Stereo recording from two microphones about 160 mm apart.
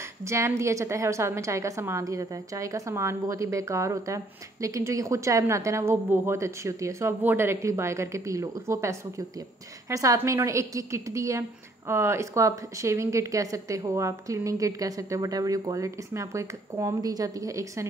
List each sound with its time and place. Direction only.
0.2 s a woman's voice: 15° right (ahead or behind)